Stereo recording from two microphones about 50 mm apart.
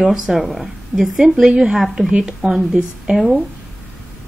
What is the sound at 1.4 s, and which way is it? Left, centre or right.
Speech, right.